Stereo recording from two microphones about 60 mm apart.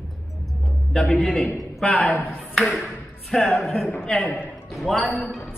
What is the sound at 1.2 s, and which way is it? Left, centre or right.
Speech, centre.